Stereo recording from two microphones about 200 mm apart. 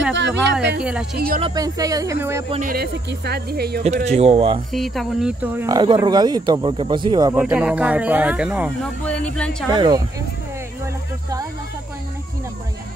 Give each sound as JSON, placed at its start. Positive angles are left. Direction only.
{"t": 0.1, "sound": "speech", "side_deg": -60}
{"t": 0.7, "sound": "speech", "side_deg": -5}
{"t": 1.1, "sound": "speech", "side_deg": -50}
{"t": 1.4, "sound": "speech", "side_deg": -20}
{"t": 2.6, "sound": "speech", "side_deg": -50}
{"t": 3.8, "sound": "speech", "side_deg": -35}
{"t": 4.7, "sound": "speech", "side_deg": 0}
{"t": 5.8, "sound": "speech", "side_deg": -20}
{"t": 7.3, "sound": "speech", "side_deg": -5}
{"t": 9.0, "sound": "speech", "side_deg": 5}
{"t": 9.7, "sound": "speech", "side_deg": -20}